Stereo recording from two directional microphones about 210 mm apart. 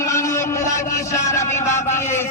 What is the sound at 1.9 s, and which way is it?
Speech, 10° left (ahead or behind).